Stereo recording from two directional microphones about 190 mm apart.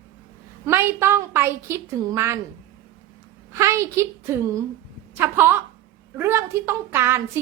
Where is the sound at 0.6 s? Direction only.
15° right (ahead or behind).